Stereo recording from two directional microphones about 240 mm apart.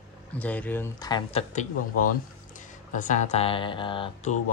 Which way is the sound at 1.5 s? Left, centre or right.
Left.